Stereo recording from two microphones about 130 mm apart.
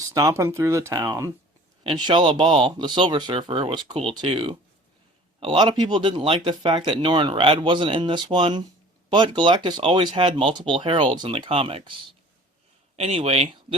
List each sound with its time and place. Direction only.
0.1 s speech: 25° right (ahead or behind)
1.8 s speech: 40° right (ahead or behind)
13.0 s speech: 55° right (ahead or behind)